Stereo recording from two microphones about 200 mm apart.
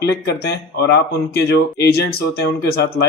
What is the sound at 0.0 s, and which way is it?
Speech, 55° left (ahead or behind).